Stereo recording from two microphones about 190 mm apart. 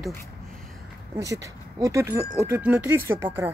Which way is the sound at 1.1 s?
15° right (ahead or behind).